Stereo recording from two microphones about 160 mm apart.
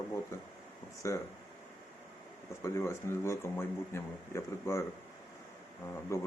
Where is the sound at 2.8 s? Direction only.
15° left (ahead or behind).